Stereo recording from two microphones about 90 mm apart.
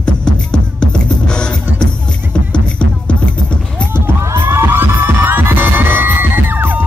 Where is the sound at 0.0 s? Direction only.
10° left (ahead or behind).